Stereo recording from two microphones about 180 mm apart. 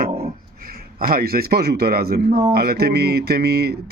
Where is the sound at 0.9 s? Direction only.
55° right (ahead or behind).